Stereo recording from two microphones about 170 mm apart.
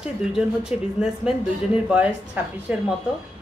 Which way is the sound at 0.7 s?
5° right (ahead or behind).